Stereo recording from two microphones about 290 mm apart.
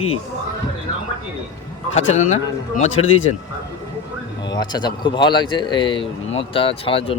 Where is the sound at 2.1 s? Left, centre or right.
Left.